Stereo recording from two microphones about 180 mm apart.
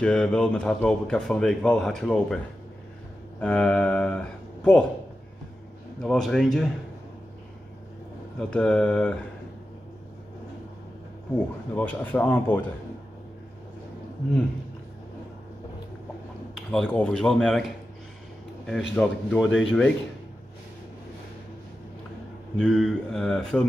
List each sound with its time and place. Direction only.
0.0 s speech: 5° left (ahead or behind)
6.0 s speech: centre (ahead or behind)
8.4 s speech: 5° left (ahead or behind)
11.3 s speech: 10° left (ahead or behind)
16.5 s speech: 5° left (ahead or behind)
18.9 s speech: centre (ahead or behind)
22.6 s speech: centre (ahead or behind)